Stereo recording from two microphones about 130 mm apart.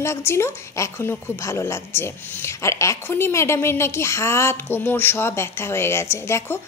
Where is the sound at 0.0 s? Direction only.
20° left (ahead or behind).